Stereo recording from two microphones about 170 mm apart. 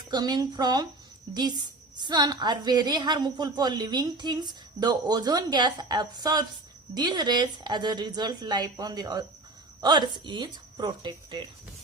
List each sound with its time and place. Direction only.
0.1 s a woman's voice: 25° right (ahead or behind)